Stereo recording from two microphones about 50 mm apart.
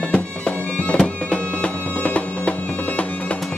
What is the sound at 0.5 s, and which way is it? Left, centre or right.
Music, left.